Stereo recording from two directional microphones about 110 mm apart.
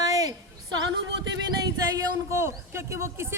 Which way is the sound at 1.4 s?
40° right (ahead or behind).